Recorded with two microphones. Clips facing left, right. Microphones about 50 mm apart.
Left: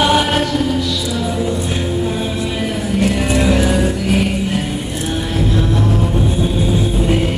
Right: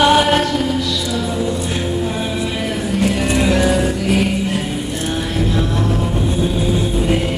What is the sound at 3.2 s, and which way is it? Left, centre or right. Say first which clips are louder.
Music: left 1 dB; centre.